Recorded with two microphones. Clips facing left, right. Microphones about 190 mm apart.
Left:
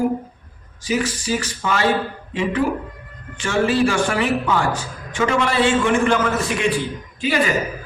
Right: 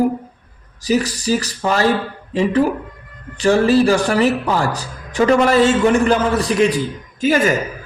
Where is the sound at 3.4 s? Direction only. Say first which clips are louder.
Right 5 dB; 35° right (ahead or behind).